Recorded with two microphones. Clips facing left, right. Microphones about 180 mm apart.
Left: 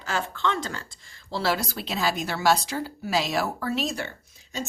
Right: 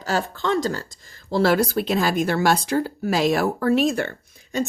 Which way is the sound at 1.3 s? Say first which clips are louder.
Right 8 dB; 50° right (ahead or behind).